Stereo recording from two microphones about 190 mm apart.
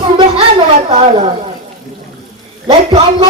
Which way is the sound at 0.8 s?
30° right (ahead or behind).